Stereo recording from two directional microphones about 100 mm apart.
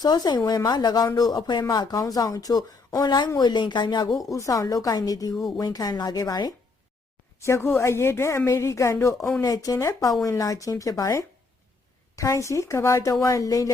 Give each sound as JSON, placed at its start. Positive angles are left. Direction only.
{"t": 0.0, "sound": "speech", "side_deg": 45}
{"t": 4.3, "sound": "speech", "side_deg": 35}
{"t": 7.4, "sound": "a woman's voice", "side_deg": 25}